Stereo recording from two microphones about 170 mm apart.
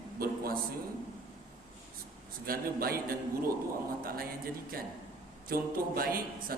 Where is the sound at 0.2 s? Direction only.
60° right (ahead or behind).